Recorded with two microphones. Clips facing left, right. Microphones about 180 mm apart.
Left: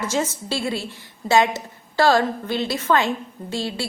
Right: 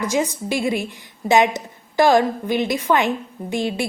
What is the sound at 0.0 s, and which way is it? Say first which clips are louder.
A woman's voice: right 3 dB; 15° right (ahead or behind).